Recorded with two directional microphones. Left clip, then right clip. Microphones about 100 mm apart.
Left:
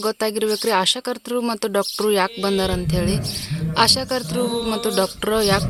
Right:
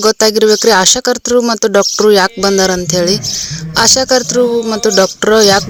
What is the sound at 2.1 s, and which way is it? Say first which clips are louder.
Speech: right 9 dB; 65° right (ahead or behind).